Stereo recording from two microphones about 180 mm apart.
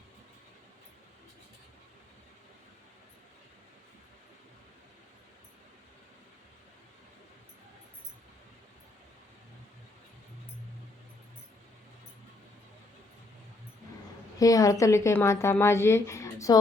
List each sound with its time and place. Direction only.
14.3 s a woman's voice: 20° left (ahead or behind)